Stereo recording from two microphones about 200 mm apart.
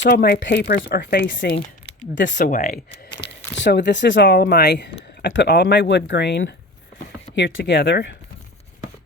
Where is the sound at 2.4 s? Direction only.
40° left (ahead or behind).